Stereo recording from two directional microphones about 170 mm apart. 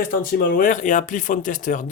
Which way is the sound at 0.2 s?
55° left (ahead or behind).